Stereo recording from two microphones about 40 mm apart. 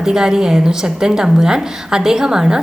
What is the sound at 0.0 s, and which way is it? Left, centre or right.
A woman's voice, centre.